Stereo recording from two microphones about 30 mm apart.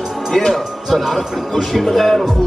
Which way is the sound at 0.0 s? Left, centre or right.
Centre.